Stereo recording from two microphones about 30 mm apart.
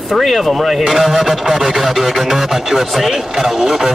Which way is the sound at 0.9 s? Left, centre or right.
Centre.